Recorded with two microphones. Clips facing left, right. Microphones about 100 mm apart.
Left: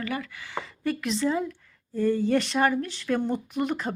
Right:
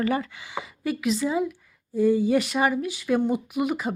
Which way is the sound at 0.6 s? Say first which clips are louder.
Even; 5° right (ahead or behind).